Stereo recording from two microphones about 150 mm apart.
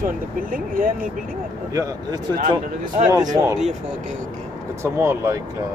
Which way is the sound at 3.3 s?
25° right (ahead or behind).